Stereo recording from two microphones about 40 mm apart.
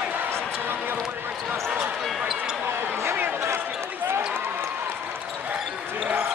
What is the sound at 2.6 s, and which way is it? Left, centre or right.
Basketball bounce, right.